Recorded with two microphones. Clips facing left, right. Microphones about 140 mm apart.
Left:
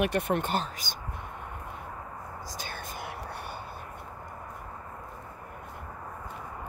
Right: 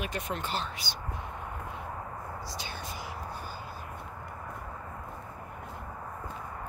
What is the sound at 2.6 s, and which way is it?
Whispering, 50° left (ahead or behind).